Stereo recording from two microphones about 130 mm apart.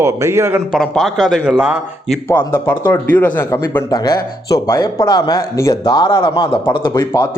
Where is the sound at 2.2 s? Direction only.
20° left (ahead or behind).